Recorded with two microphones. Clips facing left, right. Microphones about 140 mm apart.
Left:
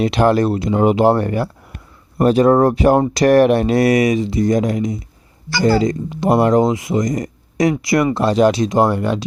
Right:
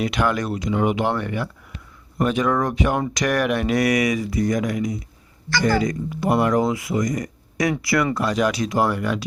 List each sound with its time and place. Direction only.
0.0 s speech: 30° left (ahead or behind)